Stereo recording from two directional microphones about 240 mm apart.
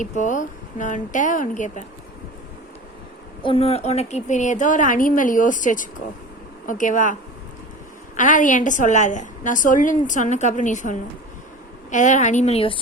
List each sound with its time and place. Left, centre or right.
0.0 s a woman's voice: left
3.4 s a woman's voice: left